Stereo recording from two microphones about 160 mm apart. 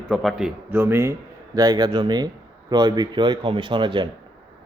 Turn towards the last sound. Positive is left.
turn(degrees=-30)  # may be behind; listen again after turning